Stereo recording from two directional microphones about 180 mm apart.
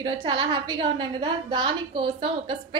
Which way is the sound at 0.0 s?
25° right (ahead or behind).